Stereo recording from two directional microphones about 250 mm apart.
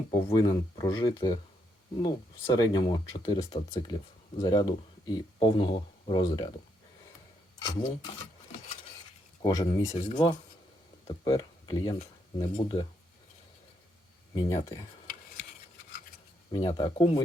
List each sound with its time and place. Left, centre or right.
0.1 s speech: centre
2.5 s speech: centre
7.6 s speech: centre
9.4 s speech: centre
14.3 s speech: centre
15.0 s cutlery: left
16.5 s speech: centre